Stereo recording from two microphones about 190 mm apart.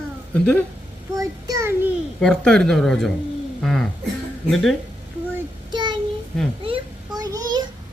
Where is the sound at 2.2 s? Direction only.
5° left (ahead or behind).